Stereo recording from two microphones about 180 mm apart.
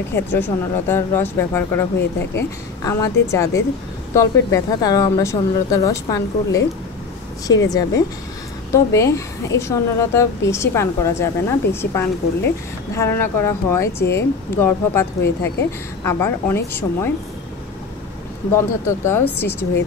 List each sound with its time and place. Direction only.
0.1 s a woman's voice: 10° left (ahead or behind)
18.5 s a woman's voice: 15° left (ahead or behind)